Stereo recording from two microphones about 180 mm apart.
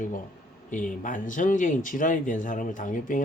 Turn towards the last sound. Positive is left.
turn(degrees=45)  # may be behind; listen again after turning